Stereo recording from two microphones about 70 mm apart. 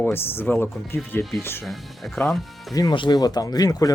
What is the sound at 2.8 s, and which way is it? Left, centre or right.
Speech, left.